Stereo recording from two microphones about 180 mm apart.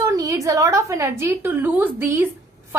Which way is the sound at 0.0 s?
20° right (ahead or behind).